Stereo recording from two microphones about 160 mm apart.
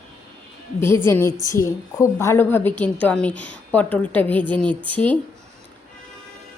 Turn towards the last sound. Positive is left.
turn(degrees=10)  # may be behind; listen again after turning